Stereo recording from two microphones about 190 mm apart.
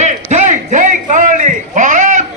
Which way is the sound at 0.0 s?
40° right (ahead or behind).